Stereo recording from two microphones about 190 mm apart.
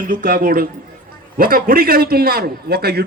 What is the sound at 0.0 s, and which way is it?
A man's voice, 45° right (ahead or behind).